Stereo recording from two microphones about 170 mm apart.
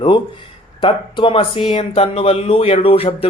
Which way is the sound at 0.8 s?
30° left (ahead or behind).